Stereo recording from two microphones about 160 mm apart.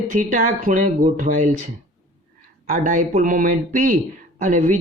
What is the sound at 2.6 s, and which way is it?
Speech, 60° right (ahead or behind).